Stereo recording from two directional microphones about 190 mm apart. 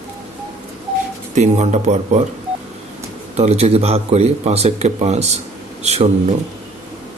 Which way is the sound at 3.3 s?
35° right (ahead or behind).